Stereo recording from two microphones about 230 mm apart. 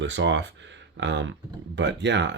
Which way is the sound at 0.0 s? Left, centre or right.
Right.